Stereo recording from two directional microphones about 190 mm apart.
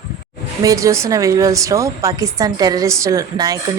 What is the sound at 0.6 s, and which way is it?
A woman's voice, 15° right (ahead or behind).